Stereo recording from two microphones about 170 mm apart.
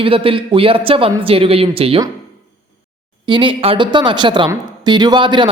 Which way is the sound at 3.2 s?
30° right (ahead or behind).